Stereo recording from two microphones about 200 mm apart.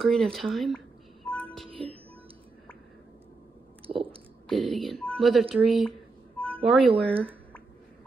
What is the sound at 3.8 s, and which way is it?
Chewing, 25° right (ahead or behind).